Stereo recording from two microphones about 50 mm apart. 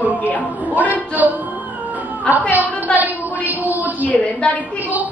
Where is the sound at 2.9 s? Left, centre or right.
Left.